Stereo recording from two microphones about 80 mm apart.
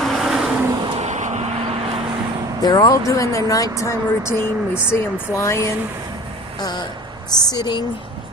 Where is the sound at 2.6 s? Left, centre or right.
Left.